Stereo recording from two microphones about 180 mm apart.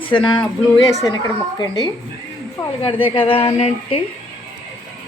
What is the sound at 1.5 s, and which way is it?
Speech, 20° left (ahead or behind).